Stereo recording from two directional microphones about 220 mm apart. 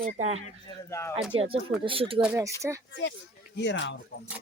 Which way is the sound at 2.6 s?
15° right (ahead or behind).